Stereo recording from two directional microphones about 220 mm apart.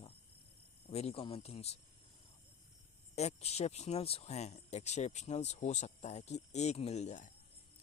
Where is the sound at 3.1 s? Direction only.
30° left (ahead or behind).